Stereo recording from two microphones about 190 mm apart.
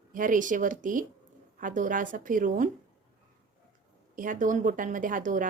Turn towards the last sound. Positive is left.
turn(degrees=-45)  # may be behind; listen again after turning